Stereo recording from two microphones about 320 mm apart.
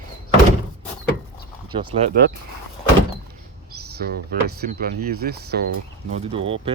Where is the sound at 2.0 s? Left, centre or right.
Centre.